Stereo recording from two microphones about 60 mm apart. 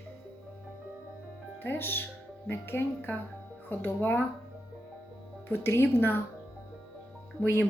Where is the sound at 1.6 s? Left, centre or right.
Left.